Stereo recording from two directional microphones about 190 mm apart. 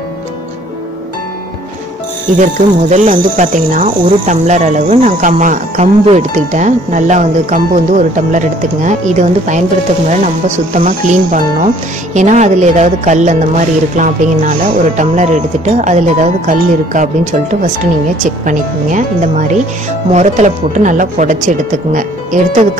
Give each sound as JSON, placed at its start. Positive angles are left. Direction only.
{"t": 2.3, "sound": "speech", "side_deg": -40}